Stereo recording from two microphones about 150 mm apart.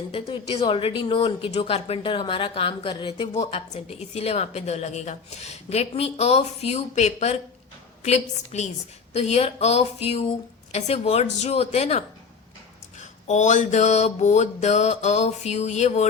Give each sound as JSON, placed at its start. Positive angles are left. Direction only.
{"t": 0.1, "sound": "a woman's voice", "side_deg": 40}
{"t": 3.3, "sound": "a woman's voice", "side_deg": 45}